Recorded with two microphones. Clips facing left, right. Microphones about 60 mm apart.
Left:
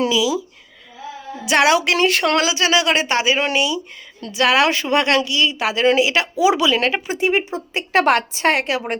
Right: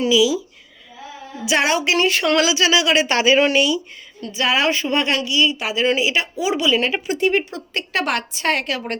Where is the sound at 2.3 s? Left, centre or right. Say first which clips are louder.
Even; left.